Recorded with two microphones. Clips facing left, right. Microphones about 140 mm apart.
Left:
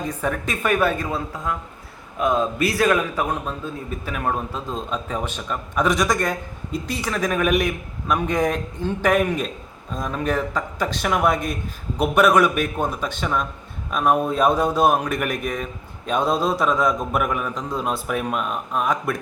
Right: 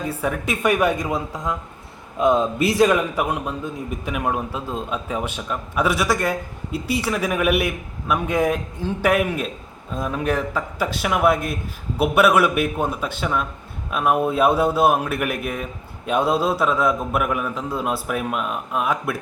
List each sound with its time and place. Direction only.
0.1 s a man's voice: 10° right (ahead or behind)